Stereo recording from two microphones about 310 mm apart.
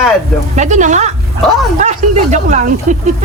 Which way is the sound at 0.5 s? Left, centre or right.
Right.